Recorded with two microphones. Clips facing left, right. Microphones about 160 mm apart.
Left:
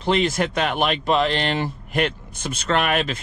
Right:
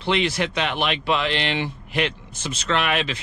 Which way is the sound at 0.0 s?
40° left (ahead or behind).